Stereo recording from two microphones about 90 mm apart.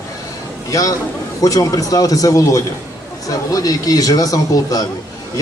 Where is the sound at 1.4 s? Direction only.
40° left (ahead or behind).